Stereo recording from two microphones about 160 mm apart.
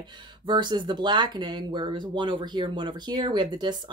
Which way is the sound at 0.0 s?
30° right (ahead or behind).